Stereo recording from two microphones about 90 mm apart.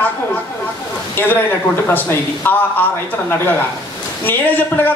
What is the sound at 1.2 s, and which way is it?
A man's voice, 25° left (ahead or behind).